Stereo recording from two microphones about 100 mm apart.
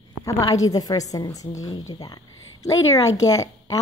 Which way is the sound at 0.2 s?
35° left (ahead or behind).